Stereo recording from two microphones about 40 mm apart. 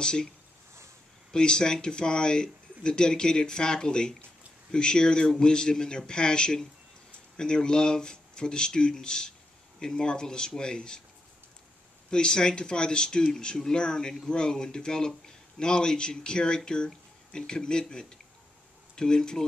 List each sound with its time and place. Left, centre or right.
0.0 s a man's voice: centre
1.3 s a man's voice: left
12.1 s a man's voice: centre